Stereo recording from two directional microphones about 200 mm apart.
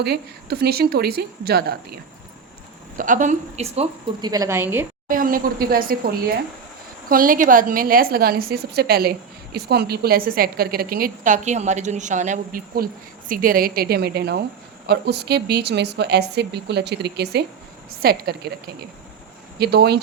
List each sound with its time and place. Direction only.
0.0 s a woman's voice: 55° right (ahead or behind)
3.0 s a woman's voice: 40° right (ahead or behind)
4.3 s a woman's voice: 15° right (ahead or behind)
5.0 s a woman's voice: 45° right (ahead or behind)
19.5 s a woman's voice: 55° right (ahead or behind)